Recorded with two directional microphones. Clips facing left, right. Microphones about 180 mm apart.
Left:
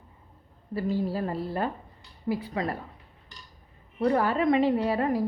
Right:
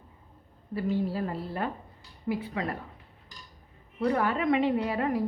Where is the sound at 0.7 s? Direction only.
40° left (ahead or behind).